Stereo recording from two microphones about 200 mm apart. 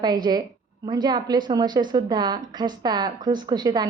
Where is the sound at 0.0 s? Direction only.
20° right (ahead or behind).